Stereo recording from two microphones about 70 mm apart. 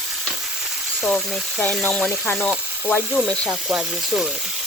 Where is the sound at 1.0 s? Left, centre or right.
Centre.